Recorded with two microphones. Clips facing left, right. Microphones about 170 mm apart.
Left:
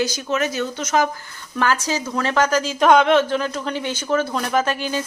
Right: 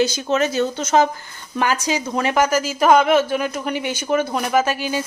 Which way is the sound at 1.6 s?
15° right (ahead or behind).